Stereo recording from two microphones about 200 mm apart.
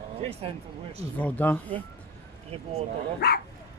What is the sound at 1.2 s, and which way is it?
Speech, 10° left (ahead or behind).